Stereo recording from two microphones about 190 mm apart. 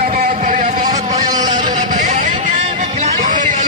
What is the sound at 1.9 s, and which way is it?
Vehicle, 40° right (ahead or behind).